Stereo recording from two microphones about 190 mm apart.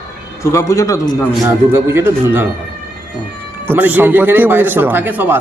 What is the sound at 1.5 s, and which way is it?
Speech, 10° right (ahead or behind).